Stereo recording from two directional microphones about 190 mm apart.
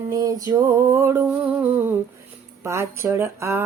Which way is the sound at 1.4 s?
5° right (ahead or behind).